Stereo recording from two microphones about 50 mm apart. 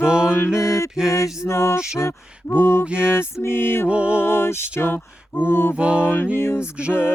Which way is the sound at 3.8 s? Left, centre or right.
Right.